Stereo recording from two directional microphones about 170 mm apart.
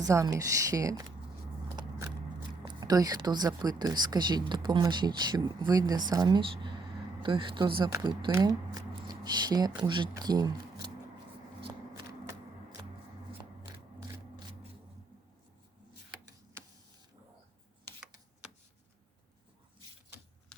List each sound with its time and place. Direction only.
0.0 s speech: 20° right (ahead or behind)
2.6 s speech: 20° right (ahead or behind)
16.6 s printer: 15° right (ahead or behind)
20.5 s a sound: 5° left (ahead or behind)